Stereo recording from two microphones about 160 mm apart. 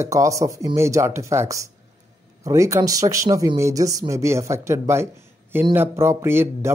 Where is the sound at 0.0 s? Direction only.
20° right (ahead or behind).